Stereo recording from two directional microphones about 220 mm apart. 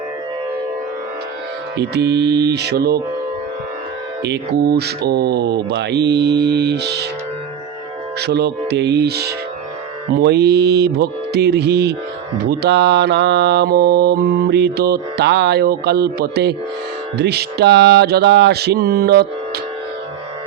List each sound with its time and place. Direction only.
1.8 s speech: 50° right (ahead or behind)
4.2 s speech: 50° right (ahead or behind)
8.2 s speech: 50° right (ahead or behind)